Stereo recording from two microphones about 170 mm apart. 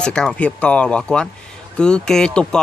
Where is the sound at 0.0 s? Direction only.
5° left (ahead or behind).